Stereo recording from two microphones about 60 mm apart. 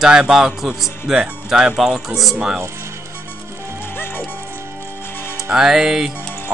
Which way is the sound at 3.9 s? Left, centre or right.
Left.